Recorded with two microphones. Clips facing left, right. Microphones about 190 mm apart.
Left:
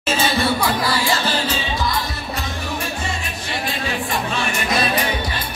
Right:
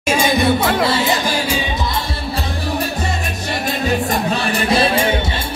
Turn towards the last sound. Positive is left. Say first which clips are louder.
# right 5 dB
turn(degrees=-30)  # may be behind; listen again after turning